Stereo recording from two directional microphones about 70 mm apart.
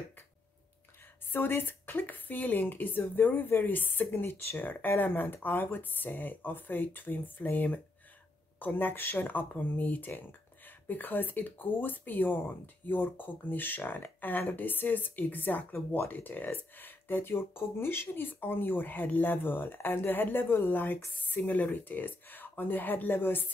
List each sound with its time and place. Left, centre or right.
1.3 s speech: left